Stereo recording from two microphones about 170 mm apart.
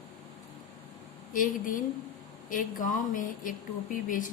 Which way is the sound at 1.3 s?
55° left (ahead or behind).